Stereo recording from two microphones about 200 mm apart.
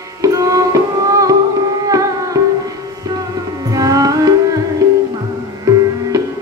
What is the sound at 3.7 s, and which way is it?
Music, 15° right (ahead or behind).